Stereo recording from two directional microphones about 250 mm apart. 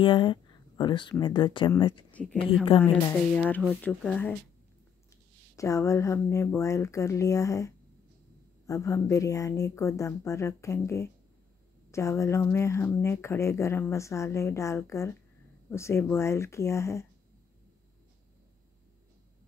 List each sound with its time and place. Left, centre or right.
0.0 s speech: centre
2.8 s speech: centre
5.6 s speech: centre